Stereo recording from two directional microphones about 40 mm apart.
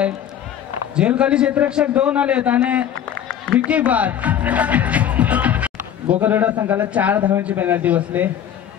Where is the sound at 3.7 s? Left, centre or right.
Right.